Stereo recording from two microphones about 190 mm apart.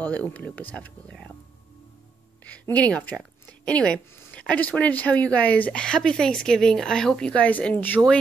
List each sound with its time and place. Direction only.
0.0 s speech: 5° left (ahead or behind)
2.4 s speech: 10° left (ahead or behind)